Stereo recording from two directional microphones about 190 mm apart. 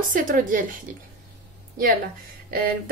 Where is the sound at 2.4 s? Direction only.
50° right (ahead or behind).